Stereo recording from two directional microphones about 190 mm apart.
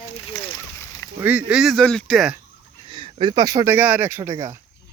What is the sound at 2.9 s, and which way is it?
Speech, 25° right (ahead or behind).